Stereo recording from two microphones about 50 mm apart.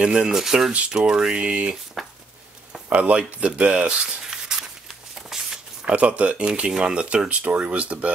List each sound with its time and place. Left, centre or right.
0.0 s speech: centre
0.7 s speech: right
2.9 s speech: right
4.2 s a sound: centre
5.9 s speech: right